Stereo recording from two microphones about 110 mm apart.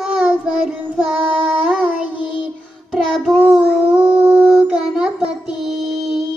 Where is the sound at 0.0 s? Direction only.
5° right (ahead or behind).